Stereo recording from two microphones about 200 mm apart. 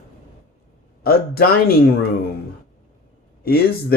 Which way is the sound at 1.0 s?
50° left (ahead or behind).